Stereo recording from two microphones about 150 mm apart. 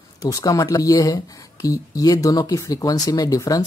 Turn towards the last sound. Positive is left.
turn(degrees=25)  # may be behind; listen again after turning